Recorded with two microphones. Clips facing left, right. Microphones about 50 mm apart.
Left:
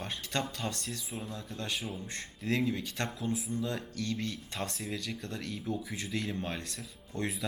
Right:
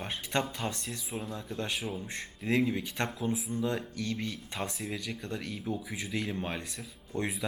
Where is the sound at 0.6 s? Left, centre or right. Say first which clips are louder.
Right 1 dB; right.